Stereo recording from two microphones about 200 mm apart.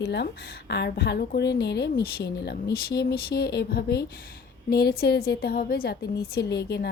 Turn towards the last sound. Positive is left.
turn(degrees=55)  # may be behind; listen again after turning